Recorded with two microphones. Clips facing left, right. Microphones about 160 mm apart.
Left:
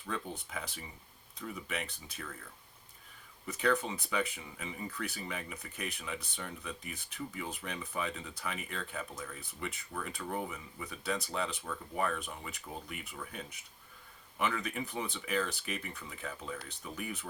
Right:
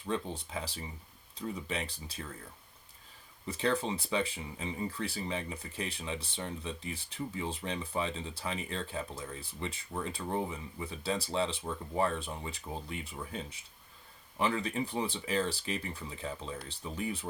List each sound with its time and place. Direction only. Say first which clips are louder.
0.0 s speech: right 4 dB; 30° right (ahead or behind)
3.4 s speech: even; 30° right (ahead or behind)